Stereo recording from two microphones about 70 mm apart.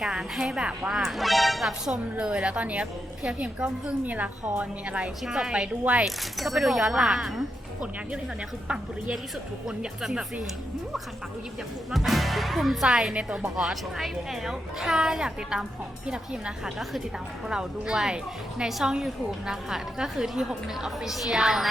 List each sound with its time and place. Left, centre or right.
0.0 s a woman's voice: centre
6.1 s a woman's voice: centre
11.9 s a woman's voice: centre